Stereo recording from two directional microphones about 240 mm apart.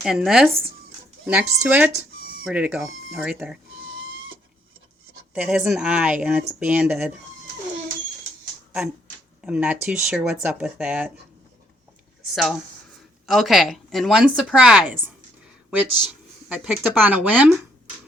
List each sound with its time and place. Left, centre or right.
0.0 s a woman's voice: centre
2.2 s a sound: right
2.5 s speech: centre
3.8 s a sound: right
5.3 s speech: centre
9.4 s speech: centre
12.3 s speech: centre
16.5 s speech: centre